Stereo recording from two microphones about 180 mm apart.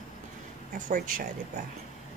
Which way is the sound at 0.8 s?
45° right (ahead or behind).